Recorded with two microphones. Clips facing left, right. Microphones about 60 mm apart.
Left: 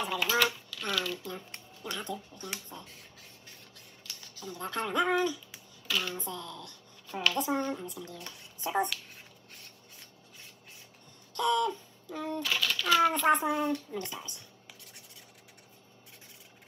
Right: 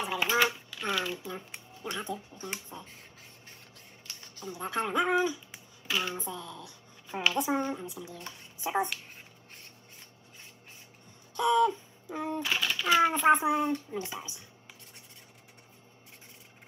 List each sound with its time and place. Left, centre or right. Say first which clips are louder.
0.0 s speech: right 1 dB; right
4.1 s a sound: right 1 dB; right
4.5 s speech: right 2 dB; centre
6.2 s a child's voice: even; centre
11.3 s a child's voice: right 3 dB; centre